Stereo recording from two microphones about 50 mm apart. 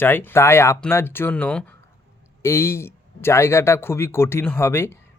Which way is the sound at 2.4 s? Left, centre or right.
Left.